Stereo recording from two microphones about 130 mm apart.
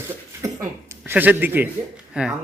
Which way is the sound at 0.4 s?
20° right (ahead or behind).